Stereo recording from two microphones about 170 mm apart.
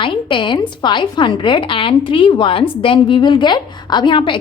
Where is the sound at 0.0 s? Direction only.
30° left (ahead or behind).